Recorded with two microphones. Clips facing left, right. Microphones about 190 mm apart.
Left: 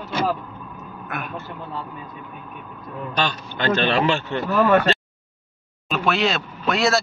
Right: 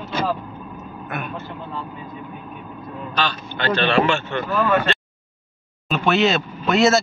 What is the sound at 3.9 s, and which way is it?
Speech, 35° left (ahead or behind).